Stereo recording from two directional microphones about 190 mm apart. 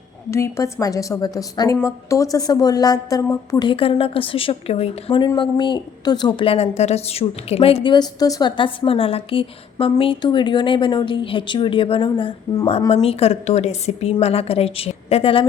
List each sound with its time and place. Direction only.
0.3 s a woman's voice: 15° left (ahead or behind)